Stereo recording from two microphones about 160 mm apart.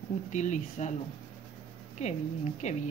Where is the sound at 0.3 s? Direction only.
50° left (ahead or behind).